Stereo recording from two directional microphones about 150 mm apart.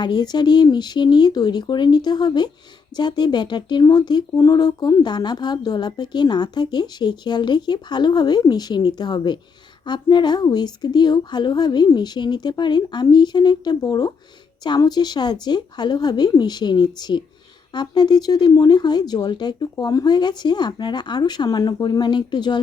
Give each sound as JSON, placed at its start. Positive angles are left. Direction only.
{"t": 0.0, "sound": "speech", "side_deg": 30}